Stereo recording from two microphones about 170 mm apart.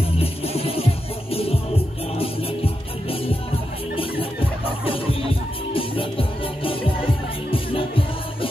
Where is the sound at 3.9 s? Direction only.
30° left (ahead or behind).